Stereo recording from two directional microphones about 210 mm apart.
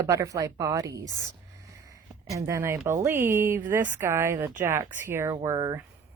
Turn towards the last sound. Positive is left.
turn(degrees=-15)  # may be behind; listen again after turning